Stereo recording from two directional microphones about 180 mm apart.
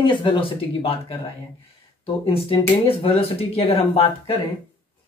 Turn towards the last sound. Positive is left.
turn(degrees=35)  # may be behind; listen again after turning